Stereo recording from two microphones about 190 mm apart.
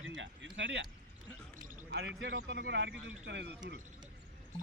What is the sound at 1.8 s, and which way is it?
Speech, 65° right (ahead or behind).